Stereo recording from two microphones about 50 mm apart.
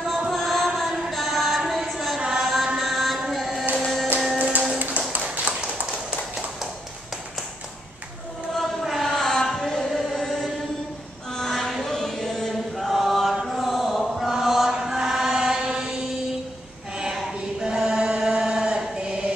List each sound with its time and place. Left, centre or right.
0.1 s chant: centre
1.6 s a sound: centre
2.1 s music: centre
2.8 s mantra: centre
3.8 s music: centre
4.4 s music: right
5.1 s tap: right
8.5 s chant: centre